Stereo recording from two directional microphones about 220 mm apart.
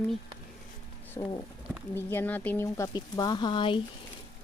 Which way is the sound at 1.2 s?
15° left (ahead or behind).